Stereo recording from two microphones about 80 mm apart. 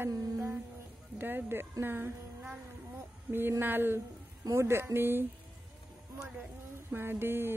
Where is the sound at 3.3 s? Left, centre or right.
Right.